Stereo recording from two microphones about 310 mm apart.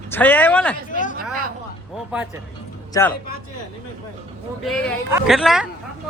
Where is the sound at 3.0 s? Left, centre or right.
Centre.